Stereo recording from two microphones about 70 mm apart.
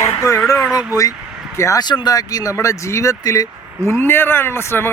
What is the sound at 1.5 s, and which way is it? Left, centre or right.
Speech, left.